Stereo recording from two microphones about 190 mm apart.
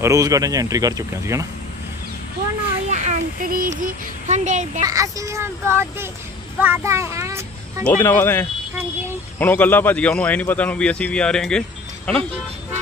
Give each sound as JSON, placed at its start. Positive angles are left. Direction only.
{"t": 0.0, "sound": "speech", "side_deg": -15}
{"t": 2.9, "sound": "child singing", "side_deg": -40}
{"t": 3.8, "sound": "a child's voice", "side_deg": -40}
{"t": 4.8, "sound": "a child's voice", "side_deg": -15}
{"t": 8.0, "sound": "a man's voice", "side_deg": 10}